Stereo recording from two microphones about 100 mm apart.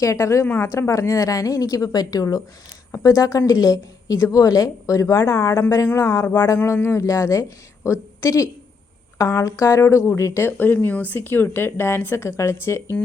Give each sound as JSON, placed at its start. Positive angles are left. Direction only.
{"t": 0.0, "sound": "a woman's voice", "side_deg": 30}
{"t": 0.4, "sound": "a woman's voice", "side_deg": 15}
{"t": 0.7, "sound": "a woman's voice", "side_deg": 30}